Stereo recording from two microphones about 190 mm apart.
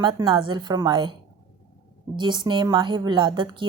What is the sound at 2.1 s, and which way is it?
Speech, 25° right (ahead or behind).